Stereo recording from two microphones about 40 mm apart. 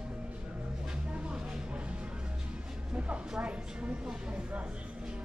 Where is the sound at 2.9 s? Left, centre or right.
Right.